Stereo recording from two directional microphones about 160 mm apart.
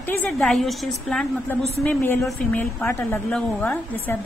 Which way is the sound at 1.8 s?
10° left (ahead or behind).